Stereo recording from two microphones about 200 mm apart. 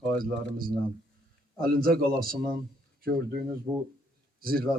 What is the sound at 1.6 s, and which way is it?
A man's voice, 50° right (ahead or behind).